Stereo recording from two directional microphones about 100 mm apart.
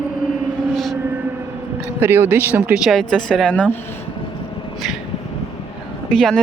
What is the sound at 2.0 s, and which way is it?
Speech, 20° right (ahead or behind).